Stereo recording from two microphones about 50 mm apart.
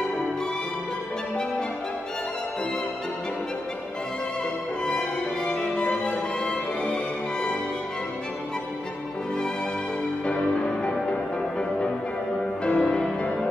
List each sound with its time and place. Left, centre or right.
4.8 s music: centre
10.2 s music: centre
12.6 s music: centre